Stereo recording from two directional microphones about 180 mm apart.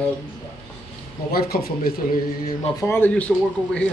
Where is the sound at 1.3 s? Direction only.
60° left (ahead or behind).